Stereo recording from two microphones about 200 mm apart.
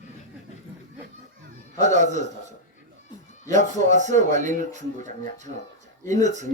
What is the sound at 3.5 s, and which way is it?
Speech, 35° right (ahead or behind).